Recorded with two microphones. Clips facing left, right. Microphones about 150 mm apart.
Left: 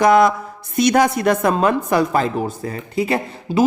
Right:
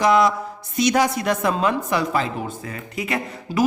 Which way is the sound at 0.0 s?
50° left (ahead or behind).